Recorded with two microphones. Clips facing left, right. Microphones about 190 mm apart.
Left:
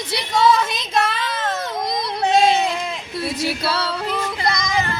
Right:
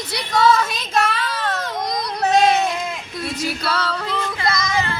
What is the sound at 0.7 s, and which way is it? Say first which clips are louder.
Child singing: even; 20° left (ahead or behind).